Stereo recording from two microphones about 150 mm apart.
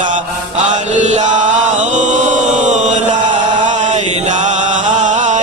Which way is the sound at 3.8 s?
55° right (ahead or behind).